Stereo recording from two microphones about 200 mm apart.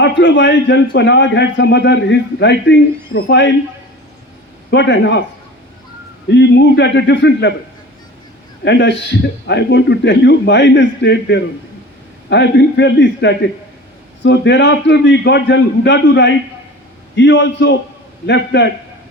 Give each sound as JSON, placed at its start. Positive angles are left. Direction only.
{"t": 0.0, "sound": "a man's voice", "side_deg": 65}
{"t": 4.7, "sound": "a man's voice", "side_deg": 60}
{"t": 6.3, "sound": "a man's voice", "side_deg": 60}
{"t": 8.6, "sound": "a man's voice", "side_deg": 60}